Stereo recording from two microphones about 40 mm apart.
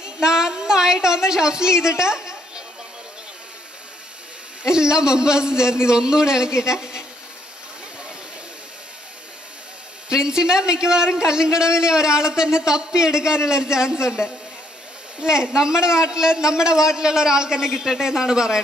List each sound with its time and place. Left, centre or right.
0.0 s a woman's voice: centre
4.6 s a man's voice: centre
10.0 s a man's voice: centre